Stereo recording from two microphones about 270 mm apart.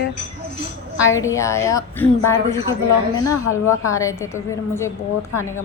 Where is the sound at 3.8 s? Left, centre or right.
Centre.